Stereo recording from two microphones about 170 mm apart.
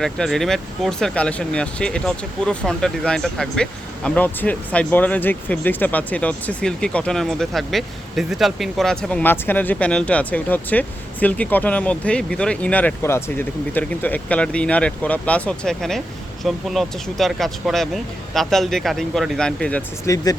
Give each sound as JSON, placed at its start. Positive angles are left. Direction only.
{"t": 0.0, "sound": "speech", "side_deg": 0}
{"t": 20.1, "sound": "speech", "side_deg": 20}